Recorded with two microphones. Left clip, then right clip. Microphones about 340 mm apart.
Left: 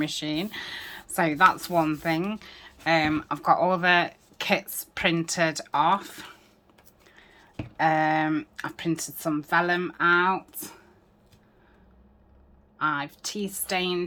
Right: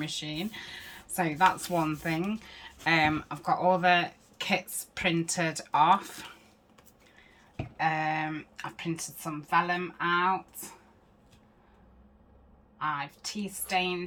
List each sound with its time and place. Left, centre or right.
0.0 s speech: centre
7.8 s speech: centre
12.8 s speech: centre